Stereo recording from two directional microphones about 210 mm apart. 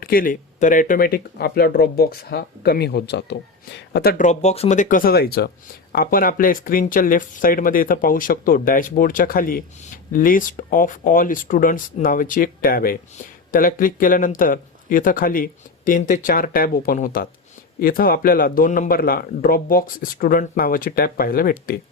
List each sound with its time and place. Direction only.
0.0 s speech: 45° left (ahead or behind)
4.2 s speech: 35° left (ahead or behind)